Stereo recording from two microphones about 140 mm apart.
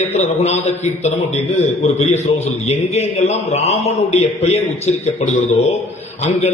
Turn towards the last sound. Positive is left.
turn(degrees=55)  # may be behind; listen again after turning